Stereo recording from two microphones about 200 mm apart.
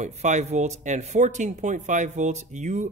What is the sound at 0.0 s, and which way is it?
Speech, 35° right (ahead or behind).